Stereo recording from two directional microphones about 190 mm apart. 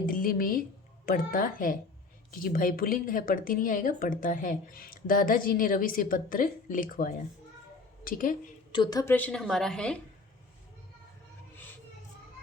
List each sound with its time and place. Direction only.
0.0 s a sound: 45° left (ahead or behind)
1.0 s speech: 45° left (ahead or behind)
8.7 s a woman's voice: 20° left (ahead or behind); by 10.0 s 5° left (ahead or behind)